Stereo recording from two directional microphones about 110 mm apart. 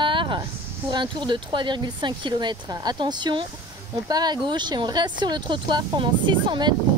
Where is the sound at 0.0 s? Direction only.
50° right (ahead or behind).